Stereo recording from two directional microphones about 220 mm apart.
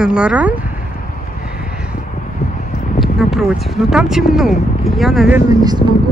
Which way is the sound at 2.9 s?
Centre (ahead or behind).